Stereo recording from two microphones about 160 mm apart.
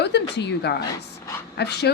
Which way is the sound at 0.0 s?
90° left.